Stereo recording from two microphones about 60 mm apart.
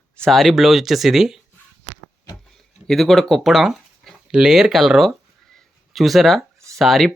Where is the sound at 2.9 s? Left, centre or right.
Centre.